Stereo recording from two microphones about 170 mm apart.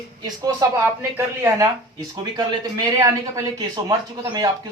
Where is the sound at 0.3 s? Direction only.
20° right (ahead or behind).